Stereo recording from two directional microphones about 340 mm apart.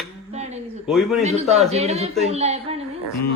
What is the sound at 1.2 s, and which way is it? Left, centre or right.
Speech, centre.